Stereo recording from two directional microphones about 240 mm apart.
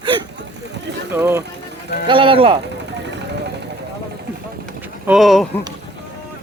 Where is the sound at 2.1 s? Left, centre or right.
Right.